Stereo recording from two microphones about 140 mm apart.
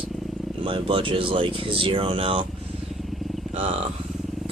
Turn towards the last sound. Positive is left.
turn(degrees=-45)  # may be behind; listen again after turning